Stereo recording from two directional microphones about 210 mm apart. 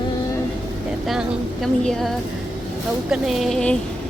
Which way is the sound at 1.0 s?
5° right (ahead or behind).